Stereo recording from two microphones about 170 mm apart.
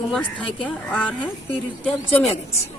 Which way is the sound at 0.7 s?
10° left (ahead or behind).